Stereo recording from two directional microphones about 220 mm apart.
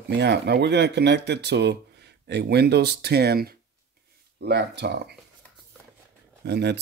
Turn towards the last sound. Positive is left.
turn(degrees=-50)  # may be behind; listen again after turning